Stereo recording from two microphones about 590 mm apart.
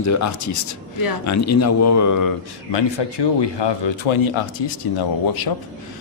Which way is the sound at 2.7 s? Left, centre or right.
Left.